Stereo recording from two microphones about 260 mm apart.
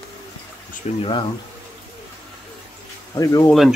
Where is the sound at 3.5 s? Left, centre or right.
Centre.